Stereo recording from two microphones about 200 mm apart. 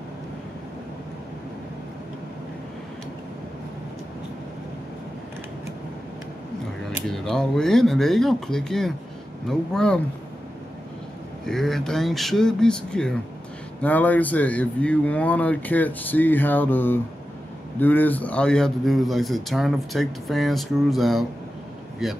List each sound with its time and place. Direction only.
7.1 s a man's voice: centre (ahead or behind)
11.4 s a man's voice: centre (ahead or behind)